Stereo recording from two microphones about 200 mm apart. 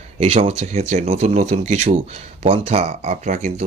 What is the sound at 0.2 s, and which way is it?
Speech, 30° right (ahead or behind).